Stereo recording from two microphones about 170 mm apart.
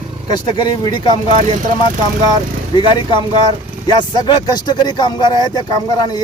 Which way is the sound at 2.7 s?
25° left (ahead or behind).